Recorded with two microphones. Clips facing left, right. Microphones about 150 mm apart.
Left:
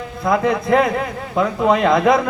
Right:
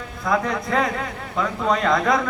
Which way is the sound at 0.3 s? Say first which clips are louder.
Left 6 dB; 20° left (ahead or behind).